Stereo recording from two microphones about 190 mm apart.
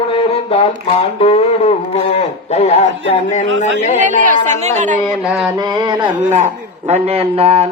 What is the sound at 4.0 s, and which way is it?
Speech, 40° right (ahead or behind).